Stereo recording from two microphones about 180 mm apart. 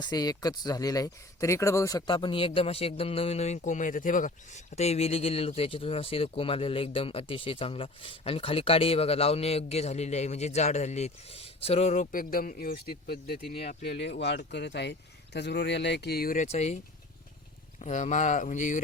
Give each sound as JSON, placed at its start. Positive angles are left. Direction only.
{"t": 0.0, "sound": "speech", "side_deg": 20}
{"t": 14.0, "sound": "speech", "side_deg": 75}
{"t": 17.7, "sound": "speech", "side_deg": 40}